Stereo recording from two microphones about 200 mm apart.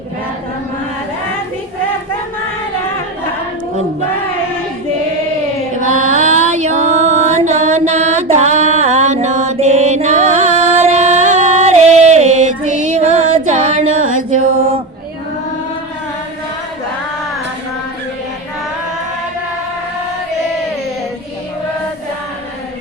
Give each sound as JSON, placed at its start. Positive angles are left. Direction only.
{"t": 5.8, "sound": "music", "side_deg": -35}
{"t": 14.2, "sound": "mantra", "side_deg": -40}